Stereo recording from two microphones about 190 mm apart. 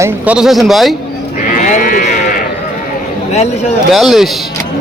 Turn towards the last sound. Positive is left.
turn(degrees=0)  # may be behind; listen again after turning